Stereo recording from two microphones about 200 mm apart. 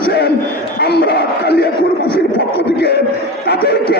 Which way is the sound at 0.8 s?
55° left (ahead or behind).